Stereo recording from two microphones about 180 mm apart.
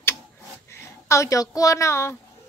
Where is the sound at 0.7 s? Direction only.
15° left (ahead or behind).